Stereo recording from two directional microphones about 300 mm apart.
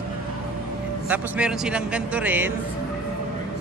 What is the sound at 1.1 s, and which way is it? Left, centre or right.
A man's voice, centre.